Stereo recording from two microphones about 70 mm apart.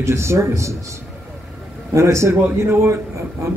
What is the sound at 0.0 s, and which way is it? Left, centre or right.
Speech, right.